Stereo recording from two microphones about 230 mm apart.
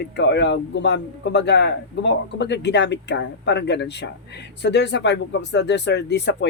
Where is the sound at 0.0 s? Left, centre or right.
Left.